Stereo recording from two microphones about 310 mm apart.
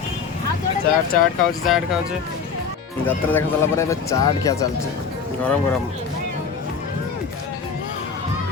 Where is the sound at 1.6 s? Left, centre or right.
Centre.